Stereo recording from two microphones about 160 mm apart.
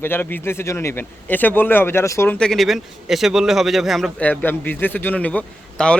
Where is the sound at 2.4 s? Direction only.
Centre (ahead or behind).